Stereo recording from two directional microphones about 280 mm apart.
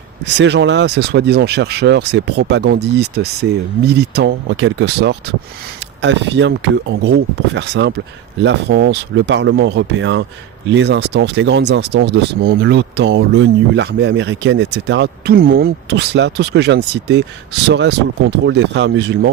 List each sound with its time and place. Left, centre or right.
0.3 s speech: right